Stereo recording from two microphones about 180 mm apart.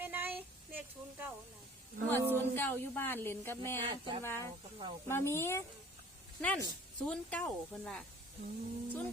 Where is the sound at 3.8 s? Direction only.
25° right (ahead or behind).